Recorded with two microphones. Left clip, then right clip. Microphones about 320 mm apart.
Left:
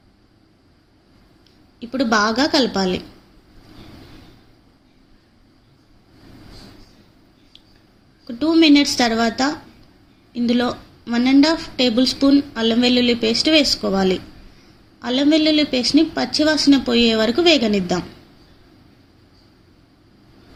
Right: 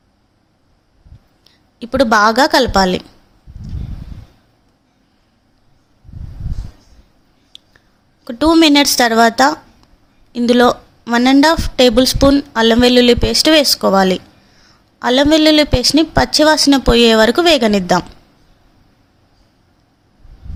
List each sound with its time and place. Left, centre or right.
1.5 s a woman's voice: right
8.2 s a woman's voice: right